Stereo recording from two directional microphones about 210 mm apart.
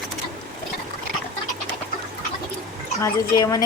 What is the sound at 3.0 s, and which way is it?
Speech, 15° left (ahead or behind).